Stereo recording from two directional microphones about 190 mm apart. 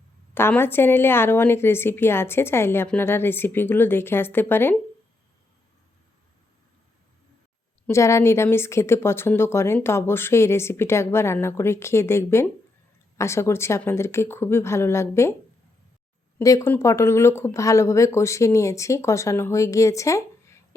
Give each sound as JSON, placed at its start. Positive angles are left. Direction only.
{"t": 0.3, "sound": "speech", "side_deg": 10}
{"t": 7.9, "sound": "speech", "side_deg": 15}
{"t": 16.4, "sound": "speech", "side_deg": 15}